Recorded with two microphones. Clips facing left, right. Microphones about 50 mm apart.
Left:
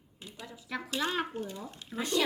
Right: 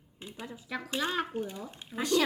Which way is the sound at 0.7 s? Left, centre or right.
Centre.